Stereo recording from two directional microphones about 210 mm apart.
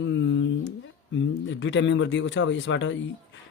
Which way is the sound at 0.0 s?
60° left (ahead or behind).